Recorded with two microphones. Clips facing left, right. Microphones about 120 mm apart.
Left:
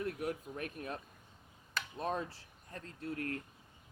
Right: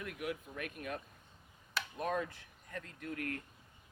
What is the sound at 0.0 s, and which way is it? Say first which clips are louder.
Speech: left 3 dB; 35° left (ahead or behind).